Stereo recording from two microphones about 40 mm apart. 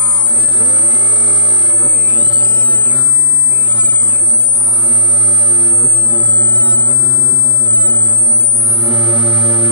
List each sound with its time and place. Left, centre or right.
5.5 s music: right
8.7 s music: right